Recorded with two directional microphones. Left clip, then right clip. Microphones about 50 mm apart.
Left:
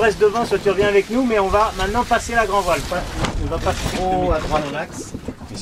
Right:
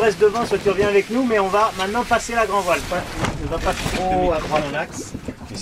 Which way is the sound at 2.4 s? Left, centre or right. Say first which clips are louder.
Left 1 dB; left.